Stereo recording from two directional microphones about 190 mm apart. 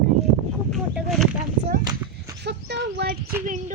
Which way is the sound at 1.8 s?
20° right (ahead or behind).